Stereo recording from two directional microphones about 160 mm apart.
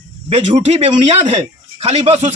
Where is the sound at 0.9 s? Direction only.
30° right (ahead or behind).